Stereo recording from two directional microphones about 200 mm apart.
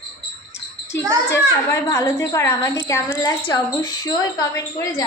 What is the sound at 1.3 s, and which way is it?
A woman's voice, 15° left (ahead or behind).